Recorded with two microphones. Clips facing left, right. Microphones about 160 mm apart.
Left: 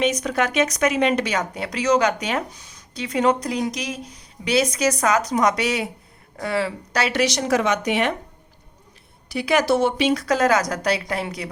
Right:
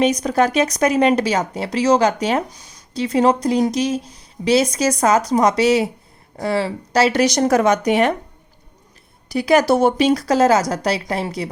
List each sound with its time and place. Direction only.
0.0 s speech: 35° right (ahead or behind)
9.3 s speech: 40° right (ahead or behind)